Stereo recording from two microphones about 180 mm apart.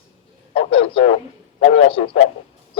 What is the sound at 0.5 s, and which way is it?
Radio, 30° left (ahead or behind).